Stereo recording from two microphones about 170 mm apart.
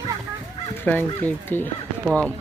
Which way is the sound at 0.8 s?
10° left (ahead or behind).